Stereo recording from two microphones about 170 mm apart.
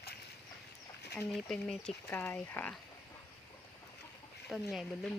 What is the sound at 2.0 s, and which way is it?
Speech, 15° left (ahead or behind).